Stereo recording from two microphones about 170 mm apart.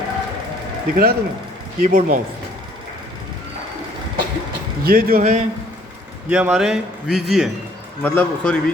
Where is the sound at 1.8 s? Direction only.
55° right (ahead or behind).